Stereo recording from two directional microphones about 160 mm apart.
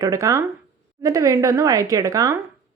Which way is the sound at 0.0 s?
20° right (ahead or behind).